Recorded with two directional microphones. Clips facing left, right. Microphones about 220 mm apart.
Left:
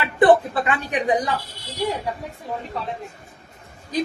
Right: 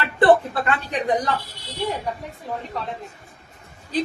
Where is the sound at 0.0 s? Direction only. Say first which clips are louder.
Left 1 dB; 15° left (ahead or behind).